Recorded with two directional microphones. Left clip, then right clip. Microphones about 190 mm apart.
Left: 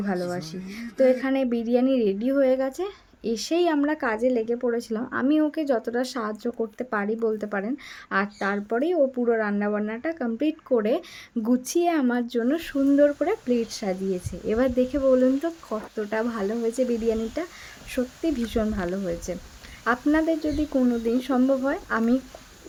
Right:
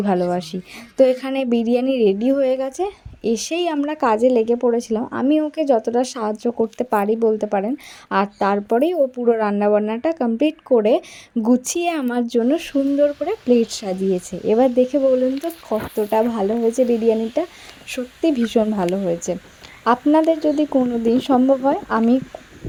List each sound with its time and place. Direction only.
0.0 s a woman's voice: 30° right (ahead or behind)